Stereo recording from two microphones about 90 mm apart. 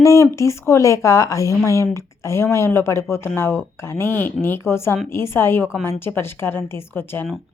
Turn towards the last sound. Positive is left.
turn(degrees=25)  # may be behind; listen again after turning